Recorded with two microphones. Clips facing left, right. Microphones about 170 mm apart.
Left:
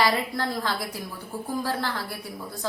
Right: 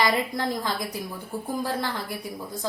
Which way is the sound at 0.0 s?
15° right (ahead or behind).